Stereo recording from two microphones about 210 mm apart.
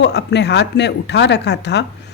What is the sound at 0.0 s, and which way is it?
Speech, 55° left (ahead or behind).